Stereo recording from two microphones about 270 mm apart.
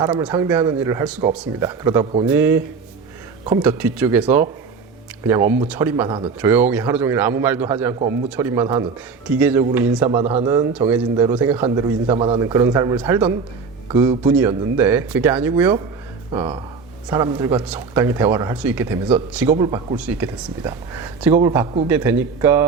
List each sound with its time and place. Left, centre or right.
0.0 s a man's voice: centre
6.4 s a man's voice: centre
10.2 s a man's voice: right; by 15.7 s centre
16.3 s a man's voice: centre